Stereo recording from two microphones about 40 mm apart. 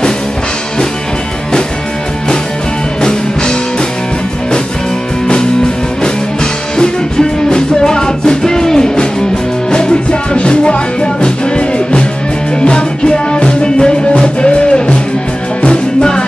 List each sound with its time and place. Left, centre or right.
3.0 s music: centre
6.8 s music: centre
10.3 s music: left